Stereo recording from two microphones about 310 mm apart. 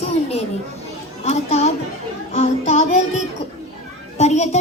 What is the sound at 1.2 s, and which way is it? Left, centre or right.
Speech, left.